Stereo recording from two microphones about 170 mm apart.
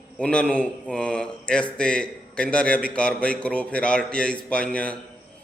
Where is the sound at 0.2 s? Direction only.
5° left (ahead or behind).